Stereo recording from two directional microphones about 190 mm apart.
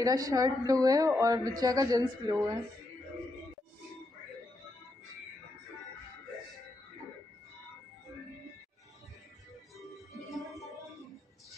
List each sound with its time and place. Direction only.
0.0 s speech: 20° right (ahead or behind)
9.8 s music: centre (ahead or behind)